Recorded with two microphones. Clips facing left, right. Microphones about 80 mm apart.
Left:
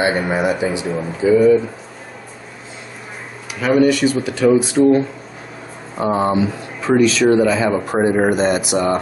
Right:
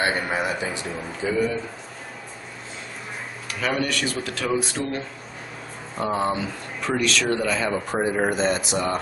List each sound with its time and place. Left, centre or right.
0.0 s speech: centre
3.5 s speech: centre
7.9 s speech: left
8.3 s speech: centre